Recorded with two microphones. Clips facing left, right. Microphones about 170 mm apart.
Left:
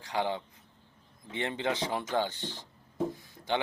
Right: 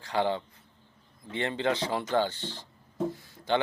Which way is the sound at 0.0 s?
15° left (ahead or behind).